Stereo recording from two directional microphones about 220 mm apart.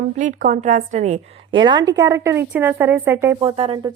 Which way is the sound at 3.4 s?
25° right (ahead or behind).